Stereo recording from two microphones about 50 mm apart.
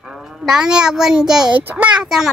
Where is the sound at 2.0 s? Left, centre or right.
Centre.